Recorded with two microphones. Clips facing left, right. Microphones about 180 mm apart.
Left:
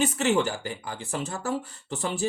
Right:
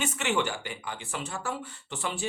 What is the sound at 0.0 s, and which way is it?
Speech, 35° left (ahead or behind).